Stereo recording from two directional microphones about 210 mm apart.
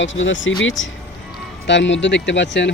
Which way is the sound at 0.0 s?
65° left (ahead or behind).